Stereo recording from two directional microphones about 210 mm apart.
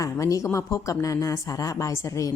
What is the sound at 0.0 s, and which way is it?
Speech, 15° left (ahead or behind).